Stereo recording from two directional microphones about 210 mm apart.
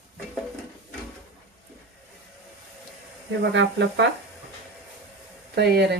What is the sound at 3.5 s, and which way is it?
Speech, 60° right (ahead or behind).